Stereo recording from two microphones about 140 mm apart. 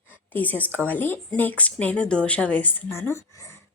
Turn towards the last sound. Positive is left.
turn(degrees=20)  # may be behind; listen again after turning